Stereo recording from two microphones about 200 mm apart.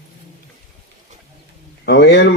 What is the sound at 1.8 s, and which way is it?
Speech, 60° left (ahead or behind).